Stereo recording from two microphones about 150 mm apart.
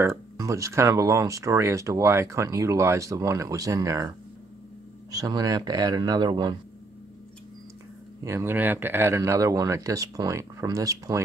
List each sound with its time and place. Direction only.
0.0 s speech: 20° right (ahead or behind)
5.1 s speech: 25° right (ahead or behind)
8.2 s speech: 20° right (ahead or behind)